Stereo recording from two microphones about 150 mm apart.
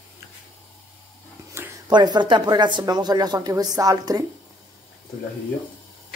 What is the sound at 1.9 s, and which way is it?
Speech, 30° right (ahead or behind).